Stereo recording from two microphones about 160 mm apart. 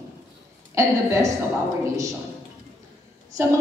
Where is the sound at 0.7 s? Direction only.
20° right (ahead or behind).